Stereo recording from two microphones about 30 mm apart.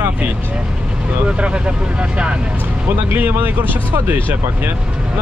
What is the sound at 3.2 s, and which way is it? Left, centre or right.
Speech, right.